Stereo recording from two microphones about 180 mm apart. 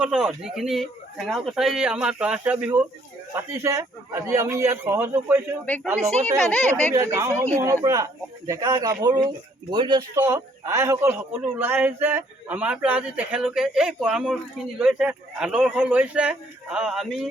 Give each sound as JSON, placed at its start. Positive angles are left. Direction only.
{"t": 0.0, "sound": "a man's voice", "side_deg": -5}
{"t": 6.1, "sound": "speech", "side_deg": -40}
{"t": 6.5, "sound": "speech", "side_deg": 10}
{"t": 6.9, "sound": "a man's voice", "side_deg": -15}